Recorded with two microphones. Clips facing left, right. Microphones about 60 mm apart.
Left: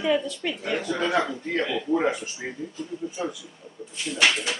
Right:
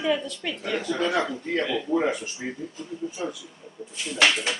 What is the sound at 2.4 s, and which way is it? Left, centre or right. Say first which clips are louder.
Speech: right 2 dB; centre.